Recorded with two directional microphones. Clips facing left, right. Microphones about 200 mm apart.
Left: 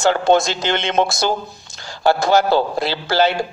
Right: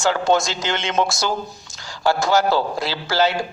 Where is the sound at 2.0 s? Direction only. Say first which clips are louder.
Left 3 dB; 60° left (ahead or behind).